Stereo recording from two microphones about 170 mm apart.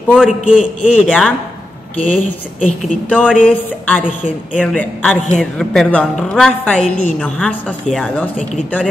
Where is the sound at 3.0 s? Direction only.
10° left (ahead or behind).